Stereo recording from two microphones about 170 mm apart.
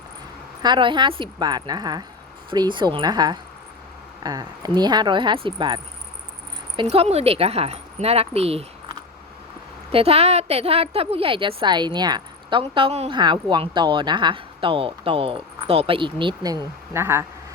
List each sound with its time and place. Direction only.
0.6 s speech: 25° right (ahead or behind)
6.8 s a woman's voice: 35° right (ahead or behind)
9.9 s a woman's voice: 35° right (ahead or behind); by 17.2 s 15° right (ahead or behind)